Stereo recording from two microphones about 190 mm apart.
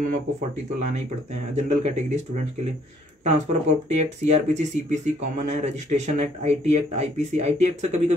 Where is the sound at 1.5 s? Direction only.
35° right (ahead or behind).